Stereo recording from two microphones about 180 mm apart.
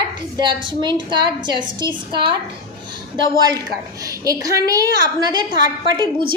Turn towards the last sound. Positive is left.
turn(degrees=-25)  # may be behind; listen again after turning